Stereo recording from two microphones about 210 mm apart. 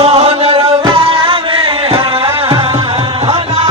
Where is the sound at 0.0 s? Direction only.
25° right (ahead or behind).